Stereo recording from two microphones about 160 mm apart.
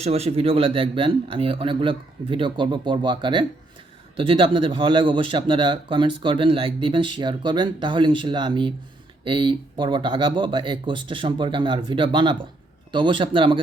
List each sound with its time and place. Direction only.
0.0 s speech: 40° right (ahead or behind)